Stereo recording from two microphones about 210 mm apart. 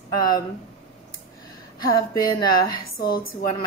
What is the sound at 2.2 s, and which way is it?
Speech, 20° left (ahead or behind).